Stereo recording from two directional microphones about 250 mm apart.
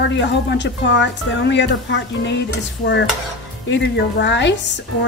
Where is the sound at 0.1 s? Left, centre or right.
Left.